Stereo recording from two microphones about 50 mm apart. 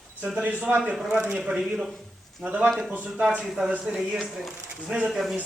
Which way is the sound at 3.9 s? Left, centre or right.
Centre.